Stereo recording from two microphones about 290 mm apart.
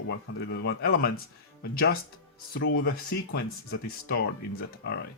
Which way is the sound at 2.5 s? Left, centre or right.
Left.